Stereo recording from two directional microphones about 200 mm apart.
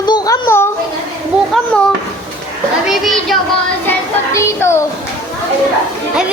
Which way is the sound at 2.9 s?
Centre (ahead or behind).